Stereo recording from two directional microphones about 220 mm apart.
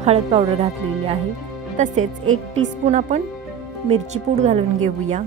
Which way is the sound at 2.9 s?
30° right (ahead or behind).